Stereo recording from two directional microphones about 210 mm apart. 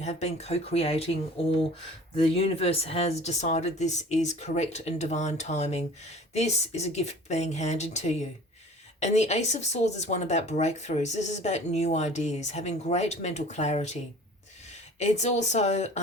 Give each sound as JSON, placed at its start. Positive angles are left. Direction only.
{"t": 0.0, "sound": "speech", "side_deg": 30}
{"t": 2.1, "sound": "speech", "side_deg": 30}